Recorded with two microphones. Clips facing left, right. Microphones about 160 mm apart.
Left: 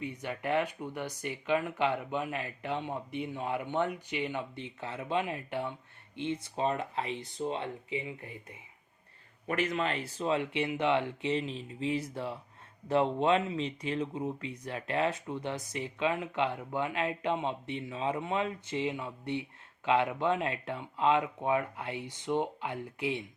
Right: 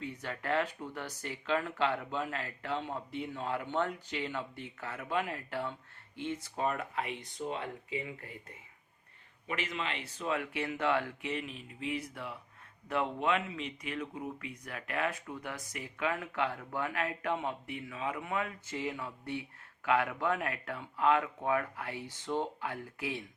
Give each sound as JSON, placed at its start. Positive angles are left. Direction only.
{"t": 0.0, "sound": "speech", "side_deg": 15}
{"t": 9.5, "sound": "speech", "side_deg": 50}